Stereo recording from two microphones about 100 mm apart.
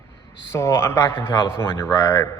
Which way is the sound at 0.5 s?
30° left (ahead or behind).